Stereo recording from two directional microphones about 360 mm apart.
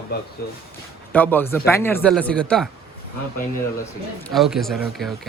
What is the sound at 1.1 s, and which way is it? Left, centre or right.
Speech, centre.